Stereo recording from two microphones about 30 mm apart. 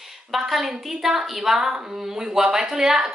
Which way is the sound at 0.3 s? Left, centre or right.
Centre.